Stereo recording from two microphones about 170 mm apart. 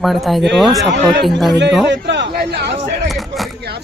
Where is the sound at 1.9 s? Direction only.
90° right; by 2.7 s 75° right (ahead or behind).